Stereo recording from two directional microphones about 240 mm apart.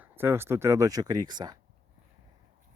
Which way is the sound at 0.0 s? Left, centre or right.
Centre.